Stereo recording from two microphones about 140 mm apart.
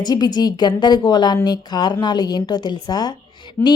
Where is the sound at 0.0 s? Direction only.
30° left (ahead or behind).